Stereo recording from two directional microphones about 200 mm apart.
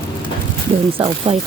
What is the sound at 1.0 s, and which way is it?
Speech, 30° right (ahead or behind).